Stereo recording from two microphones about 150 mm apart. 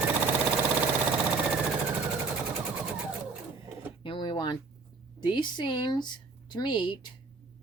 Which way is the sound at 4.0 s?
35° left (ahead or behind).